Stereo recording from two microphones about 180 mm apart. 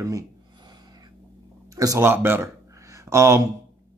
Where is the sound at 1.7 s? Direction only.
20° right (ahead or behind).